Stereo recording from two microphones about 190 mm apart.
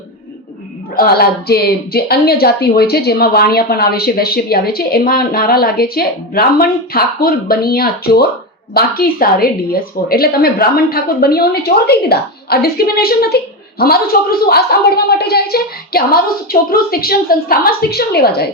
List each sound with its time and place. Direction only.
0.9 s a woman's voice: 55° left (ahead or behind)